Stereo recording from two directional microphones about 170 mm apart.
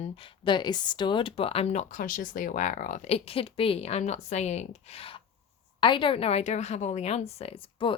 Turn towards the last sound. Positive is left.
turn(degrees=35)  # may be behind; listen again after turning